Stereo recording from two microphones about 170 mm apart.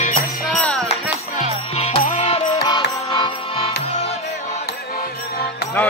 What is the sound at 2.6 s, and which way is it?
Music, 25° left (ahead or behind).